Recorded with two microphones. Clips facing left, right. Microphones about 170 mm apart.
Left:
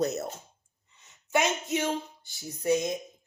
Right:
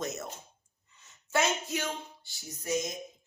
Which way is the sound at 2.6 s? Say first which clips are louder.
Left 6 dB; 60° left (ahead or behind).